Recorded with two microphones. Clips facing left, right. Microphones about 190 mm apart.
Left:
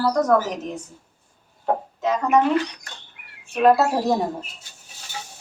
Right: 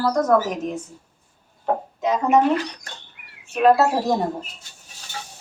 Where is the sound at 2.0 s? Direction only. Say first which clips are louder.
Right 2 dB; 20° right (ahead or behind).